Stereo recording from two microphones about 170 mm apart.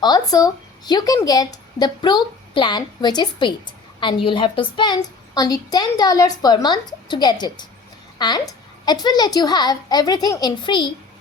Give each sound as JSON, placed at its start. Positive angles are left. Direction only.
{"t": 0.0, "sound": "a woman's voice", "side_deg": 20}